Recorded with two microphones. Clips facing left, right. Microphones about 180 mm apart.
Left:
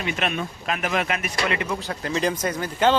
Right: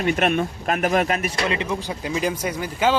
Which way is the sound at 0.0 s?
50° right (ahead or behind).